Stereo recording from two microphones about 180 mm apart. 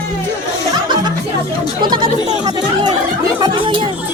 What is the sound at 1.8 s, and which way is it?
Chatter, 25° right (ahead or behind).